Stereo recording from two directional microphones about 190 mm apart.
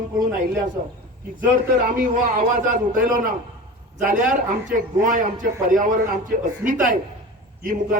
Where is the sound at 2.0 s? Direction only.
45° right (ahead or behind).